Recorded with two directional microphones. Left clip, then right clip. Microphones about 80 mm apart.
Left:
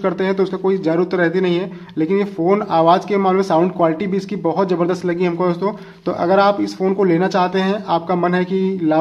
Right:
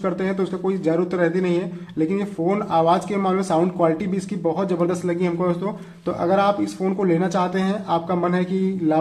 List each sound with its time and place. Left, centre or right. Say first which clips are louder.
0.0 s speech: left 6 dB; left
6.2 s speech: left 5 dB; left